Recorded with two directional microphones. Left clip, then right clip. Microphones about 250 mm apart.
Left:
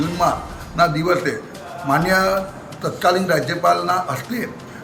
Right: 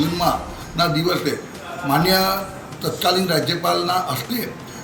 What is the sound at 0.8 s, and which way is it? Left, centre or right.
A man's voice, centre.